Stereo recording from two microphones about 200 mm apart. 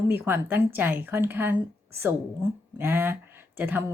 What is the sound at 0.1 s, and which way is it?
Speech, 10° right (ahead or behind).